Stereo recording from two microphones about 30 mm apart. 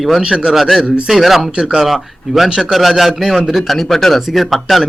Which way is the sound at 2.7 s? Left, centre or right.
Centre.